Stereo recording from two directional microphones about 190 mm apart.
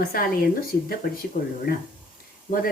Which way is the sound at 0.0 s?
50° left (ahead or behind).